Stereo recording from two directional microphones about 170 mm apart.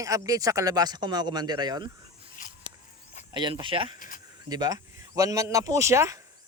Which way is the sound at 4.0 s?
55° left (ahead or behind).